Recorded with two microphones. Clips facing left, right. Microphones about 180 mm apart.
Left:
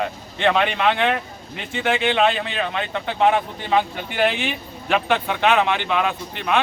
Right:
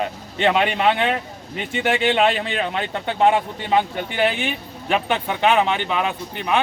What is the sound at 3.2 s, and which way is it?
Speech, 20° right (ahead or behind).